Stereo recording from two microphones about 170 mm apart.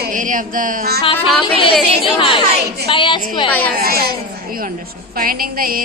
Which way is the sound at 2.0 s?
30° left (ahead or behind).